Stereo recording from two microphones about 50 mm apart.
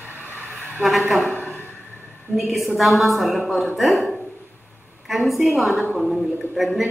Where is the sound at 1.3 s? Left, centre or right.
Left.